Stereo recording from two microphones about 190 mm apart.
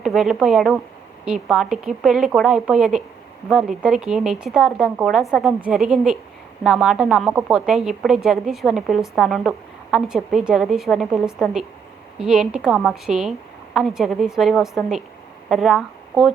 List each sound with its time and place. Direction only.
0.0 s a woman's voice: centre (ahead or behind)